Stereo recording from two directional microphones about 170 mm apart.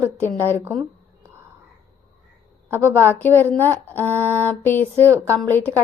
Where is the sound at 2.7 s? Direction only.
15° right (ahead or behind).